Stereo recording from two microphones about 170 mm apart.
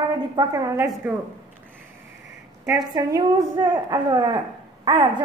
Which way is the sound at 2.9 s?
25° right (ahead or behind).